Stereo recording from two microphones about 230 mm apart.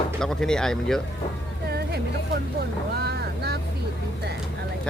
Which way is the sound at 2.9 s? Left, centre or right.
Right.